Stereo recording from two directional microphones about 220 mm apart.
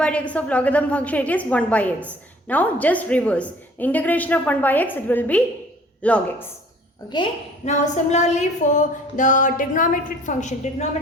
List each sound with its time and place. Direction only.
0.0 s a woman's voice: 5° left (ahead or behind)
7.6 s a woman's voice: 30° left (ahead or behind)